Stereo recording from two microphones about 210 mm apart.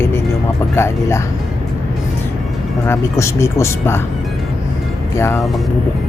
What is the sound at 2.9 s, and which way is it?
Speech, 15° left (ahead or behind).